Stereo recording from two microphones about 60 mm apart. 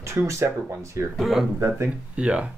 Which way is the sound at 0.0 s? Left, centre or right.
Right.